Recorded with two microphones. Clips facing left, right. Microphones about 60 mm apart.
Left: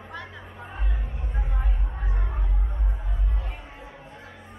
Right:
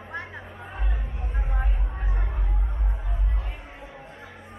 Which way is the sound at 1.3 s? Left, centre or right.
Centre.